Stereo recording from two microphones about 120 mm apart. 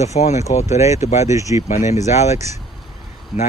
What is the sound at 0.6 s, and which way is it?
Speech, 25° right (ahead or behind).